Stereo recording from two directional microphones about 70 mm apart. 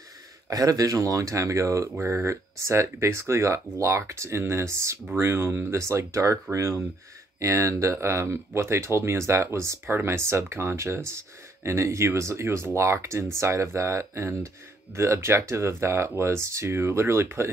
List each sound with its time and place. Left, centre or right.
0.5 s speech: right